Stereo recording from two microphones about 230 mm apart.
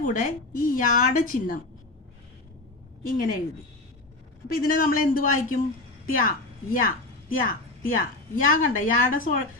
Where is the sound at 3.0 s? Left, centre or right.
Left.